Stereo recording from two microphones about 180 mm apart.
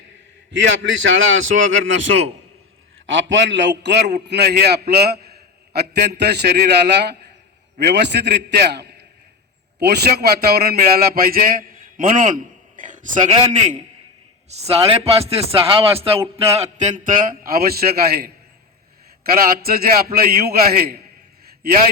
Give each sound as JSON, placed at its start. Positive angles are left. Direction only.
{"t": 0.5, "sound": "a man's voice", "side_deg": -90}